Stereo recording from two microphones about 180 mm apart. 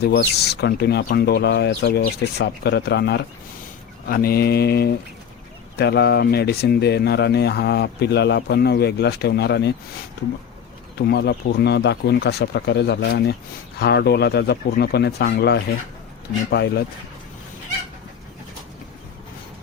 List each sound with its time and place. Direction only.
0.0 s speech: 65° left (ahead or behind)
4.1 s speech: 55° left (ahead or behind)
11.1 s speech: 65° left (ahead or behind)